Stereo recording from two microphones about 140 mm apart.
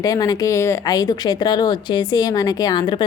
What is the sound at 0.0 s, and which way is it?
A woman's voice, 25° left (ahead or behind).